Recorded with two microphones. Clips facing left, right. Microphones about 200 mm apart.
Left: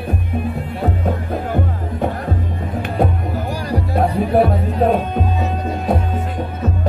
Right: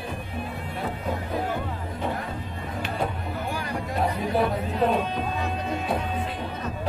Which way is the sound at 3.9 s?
60° left (ahead or behind).